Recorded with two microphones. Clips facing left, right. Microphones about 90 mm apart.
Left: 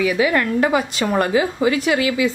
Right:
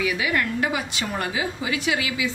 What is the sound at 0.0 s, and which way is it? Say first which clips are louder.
A woman's voice: left 6 dB; 40° left (ahead or behind).